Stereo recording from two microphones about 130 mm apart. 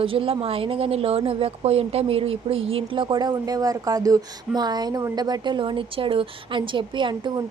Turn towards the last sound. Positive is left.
turn(degrees=-35)  # may be behind; listen again after turning